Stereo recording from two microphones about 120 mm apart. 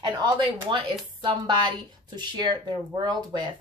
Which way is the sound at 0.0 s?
40° right (ahead or behind).